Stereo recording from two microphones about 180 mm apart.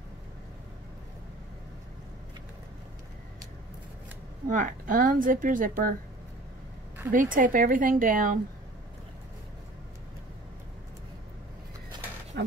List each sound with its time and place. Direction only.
4.5 s a woman's voice: 45° right (ahead or behind)
7.1 s a woman's voice: 50° right (ahead or behind)
12.4 s speech: 70° right (ahead or behind)